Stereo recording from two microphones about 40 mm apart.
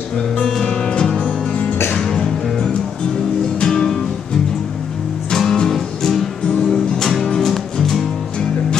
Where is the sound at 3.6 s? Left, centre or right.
Centre.